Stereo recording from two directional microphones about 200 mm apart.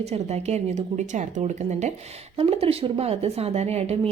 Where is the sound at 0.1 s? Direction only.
35° right (ahead or behind).